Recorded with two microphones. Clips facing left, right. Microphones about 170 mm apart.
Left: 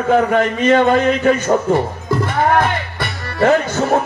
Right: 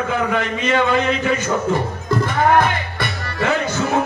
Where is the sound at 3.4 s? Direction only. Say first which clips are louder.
Left 6 dB; 45° left (ahead or behind).